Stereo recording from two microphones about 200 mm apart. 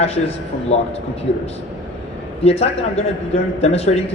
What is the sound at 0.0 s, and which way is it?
Speech, 30° left (ahead or behind).